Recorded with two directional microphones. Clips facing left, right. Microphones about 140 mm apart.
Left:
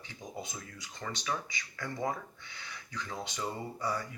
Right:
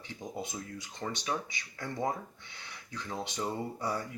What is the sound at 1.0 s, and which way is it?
Speech, 30° right (ahead or behind).